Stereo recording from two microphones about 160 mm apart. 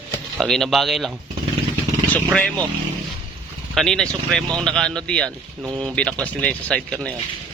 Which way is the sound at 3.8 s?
5° left (ahead or behind).